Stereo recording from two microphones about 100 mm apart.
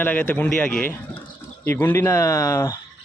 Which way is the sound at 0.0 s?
20° left (ahead or behind).